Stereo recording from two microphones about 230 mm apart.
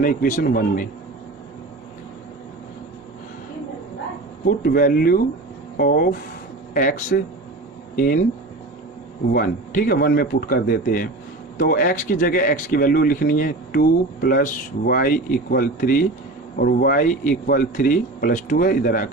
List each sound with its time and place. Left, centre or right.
0.0 s speech: left
4.4 s speech: left
9.3 s speech: left